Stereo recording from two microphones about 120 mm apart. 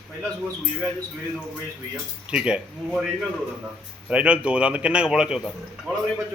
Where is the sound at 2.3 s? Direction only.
5° right (ahead or behind).